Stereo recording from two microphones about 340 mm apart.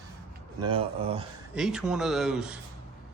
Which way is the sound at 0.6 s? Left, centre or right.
Centre.